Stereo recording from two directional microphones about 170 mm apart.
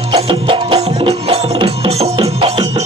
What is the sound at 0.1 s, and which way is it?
Music, 30° right (ahead or behind).